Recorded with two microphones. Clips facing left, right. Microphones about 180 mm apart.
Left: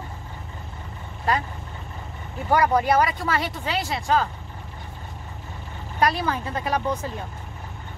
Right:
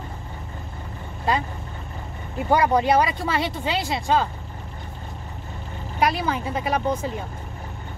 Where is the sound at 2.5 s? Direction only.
20° right (ahead or behind).